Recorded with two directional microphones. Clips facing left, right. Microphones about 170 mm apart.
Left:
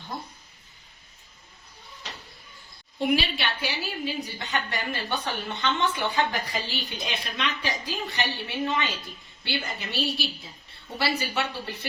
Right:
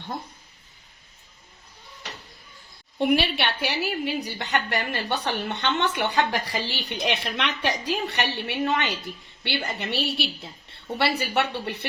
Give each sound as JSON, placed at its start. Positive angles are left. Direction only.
{"t": 3.0, "sound": "a woman's voice", "side_deg": -60}